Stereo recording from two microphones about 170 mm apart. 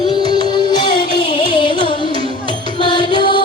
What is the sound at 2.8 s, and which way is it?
Music, 25° left (ahead or behind).